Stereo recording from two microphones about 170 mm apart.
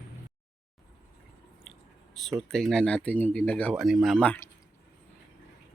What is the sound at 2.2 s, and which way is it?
Speech, centre (ahead or behind).